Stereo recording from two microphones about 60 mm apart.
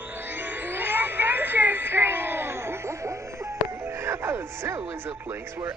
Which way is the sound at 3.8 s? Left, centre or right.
Right.